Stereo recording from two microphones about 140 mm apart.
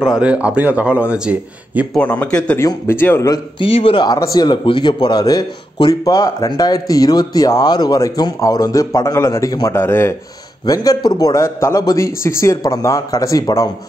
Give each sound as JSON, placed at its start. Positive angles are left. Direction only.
{"t": 0.0, "sound": "a man's voice", "side_deg": -5}
{"t": 2.0, "sound": "speech", "side_deg": 10}
{"t": 3.5, "sound": "speech", "side_deg": 40}